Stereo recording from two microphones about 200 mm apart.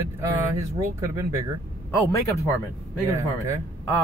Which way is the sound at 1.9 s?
15° left (ahead or behind).